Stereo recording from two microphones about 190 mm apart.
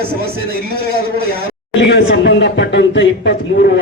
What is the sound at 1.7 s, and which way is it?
A man's voice, 70° left (ahead or behind).